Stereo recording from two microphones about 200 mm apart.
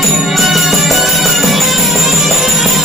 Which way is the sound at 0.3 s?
Centre (ahead or behind).